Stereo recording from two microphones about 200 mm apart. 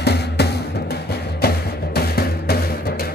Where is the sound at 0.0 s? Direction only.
55° left (ahead or behind).